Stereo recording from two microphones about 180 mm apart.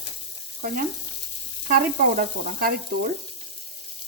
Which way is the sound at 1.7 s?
50° right (ahead or behind).